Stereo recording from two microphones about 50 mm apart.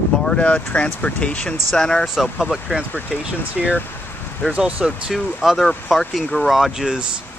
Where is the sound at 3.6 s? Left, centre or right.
Centre.